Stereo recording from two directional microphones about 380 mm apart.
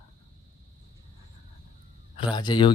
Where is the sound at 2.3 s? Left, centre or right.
Centre.